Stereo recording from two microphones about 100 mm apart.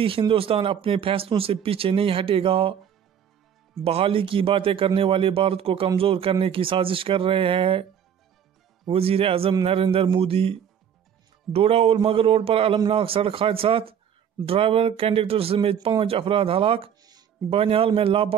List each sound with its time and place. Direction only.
0.3 s speech: 65° right (ahead or behind)
3.8 s a man's voice: 75° right (ahead or behind)
8.9 s a man's voice: 75° right (ahead or behind)